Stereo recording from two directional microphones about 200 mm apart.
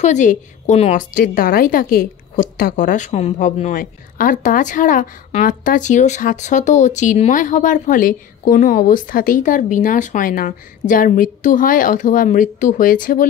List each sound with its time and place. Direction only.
0.0 s a woman's voice: 35° left (ahead or behind)